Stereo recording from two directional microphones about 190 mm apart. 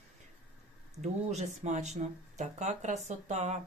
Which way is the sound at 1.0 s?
35° right (ahead or behind).